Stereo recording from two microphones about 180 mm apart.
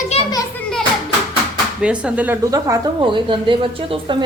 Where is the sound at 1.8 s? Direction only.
5° right (ahead or behind).